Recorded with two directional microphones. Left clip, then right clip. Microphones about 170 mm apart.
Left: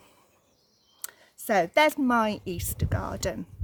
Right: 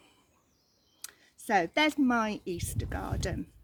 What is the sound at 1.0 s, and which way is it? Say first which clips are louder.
Speech: left 5 dB; 45° left (ahead or behind).